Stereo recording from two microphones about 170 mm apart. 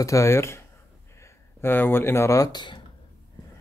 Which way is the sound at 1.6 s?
10° left (ahead or behind).